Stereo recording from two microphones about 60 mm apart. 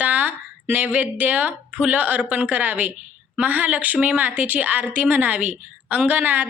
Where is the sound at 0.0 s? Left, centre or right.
Right.